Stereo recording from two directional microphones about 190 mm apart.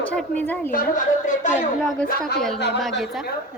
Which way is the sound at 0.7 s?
45° left (ahead or behind).